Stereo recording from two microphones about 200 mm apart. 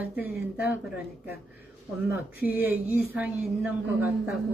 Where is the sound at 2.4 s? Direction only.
10° right (ahead or behind).